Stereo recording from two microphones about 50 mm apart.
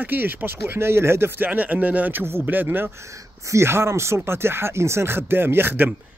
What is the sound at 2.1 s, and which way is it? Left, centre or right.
Speech, right.